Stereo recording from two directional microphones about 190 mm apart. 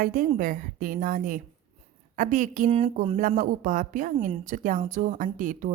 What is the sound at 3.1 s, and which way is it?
Speech, 45° right (ahead or behind).